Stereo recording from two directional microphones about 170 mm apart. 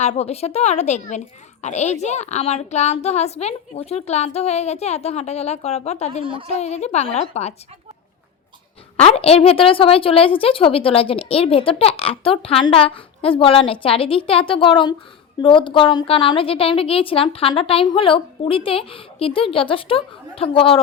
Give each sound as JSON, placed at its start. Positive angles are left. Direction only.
{"t": 0.0, "sound": "a woman's voice", "side_deg": 40}
{"t": 6.2, "sound": "a woman's voice", "side_deg": -30}
{"t": 6.5, "sound": "a woman's voice", "side_deg": 40}
{"t": 9.0, "sound": "a woman's voice", "side_deg": 35}